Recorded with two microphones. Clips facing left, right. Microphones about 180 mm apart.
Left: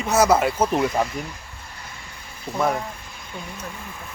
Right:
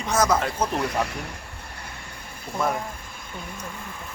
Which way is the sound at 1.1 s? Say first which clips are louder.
Left 3 dB; 60° right (ahead or behind).